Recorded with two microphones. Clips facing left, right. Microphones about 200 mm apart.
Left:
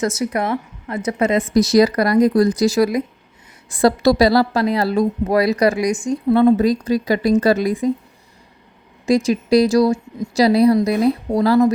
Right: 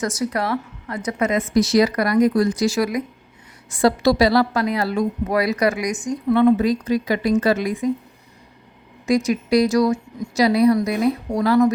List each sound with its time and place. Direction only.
0.0 s a woman's voice: 25° left (ahead or behind)
9.0 s speech: 30° left (ahead or behind)